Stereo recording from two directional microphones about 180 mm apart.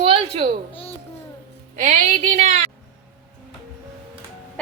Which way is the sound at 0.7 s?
30° left (ahead or behind).